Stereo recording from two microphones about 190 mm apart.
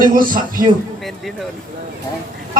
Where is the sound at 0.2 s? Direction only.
45° right (ahead or behind).